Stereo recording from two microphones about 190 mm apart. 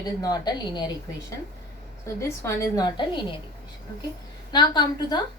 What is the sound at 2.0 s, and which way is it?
A woman's voice, 15° left (ahead or behind).